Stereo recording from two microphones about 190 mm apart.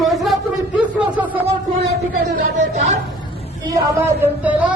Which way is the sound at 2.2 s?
65° right (ahead or behind).